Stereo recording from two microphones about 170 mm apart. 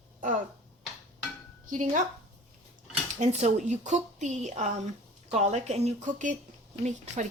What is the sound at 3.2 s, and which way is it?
A woman's voice, 40° right (ahead or behind).